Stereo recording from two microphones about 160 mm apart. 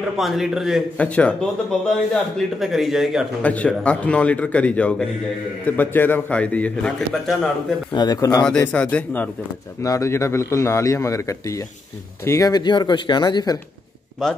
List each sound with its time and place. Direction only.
0.2 s speech: centre (ahead or behind)
0.9 s a man's voice: 10° left (ahead or behind)
3.4 s a man's voice: 10° left (ahead or behind)
7.9 s a man's voice: 25° left (ahead or behind)
8.5 s a man's voice: 5° left (ahead or behind); by 13.6 s 25° left (ahead or behind)
14.2 s speech: 5° left (ahead or behind)